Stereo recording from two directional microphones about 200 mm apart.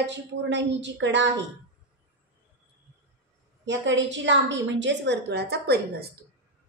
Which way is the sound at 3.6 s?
65° right (ahead or behind).